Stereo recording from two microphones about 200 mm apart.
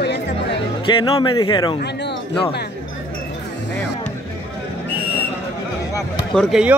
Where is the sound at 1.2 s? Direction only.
25° left (ahead or behind).